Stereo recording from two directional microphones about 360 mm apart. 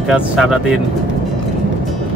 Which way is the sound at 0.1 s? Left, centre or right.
Centre.